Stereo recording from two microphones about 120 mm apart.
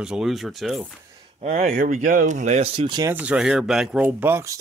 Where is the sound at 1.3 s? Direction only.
70° right (ahead or behind); by 2.6 s 85° right.